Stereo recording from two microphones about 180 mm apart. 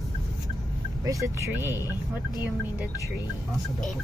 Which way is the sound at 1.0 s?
15° right (ahead or behind).